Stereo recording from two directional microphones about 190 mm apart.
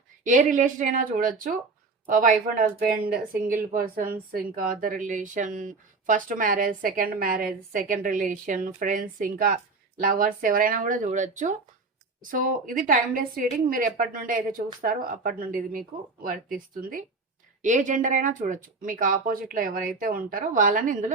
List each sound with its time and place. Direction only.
0.3 s speech: 40° right (ahead or behind)